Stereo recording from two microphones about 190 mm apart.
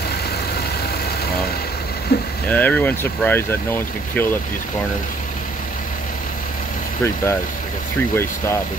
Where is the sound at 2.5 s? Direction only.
10° left (ahead or behind).